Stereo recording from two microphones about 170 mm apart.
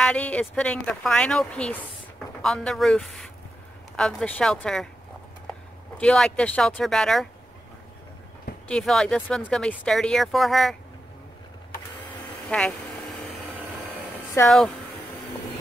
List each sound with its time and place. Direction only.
0.0 s speech: 5° left (ahead or behind)
5.9 s speech: 5° left (ahead or behind)
8.6 s speech: 5° left (ahead or behind)
12.4 s speech: 5° left (ahead or behind)
14.4 s speech: 15° left (ahead or behind)